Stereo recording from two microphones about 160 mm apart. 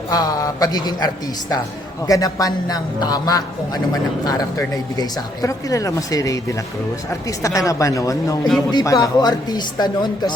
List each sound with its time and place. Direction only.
0.1 s a man's voice: 25° left (ahead or behind)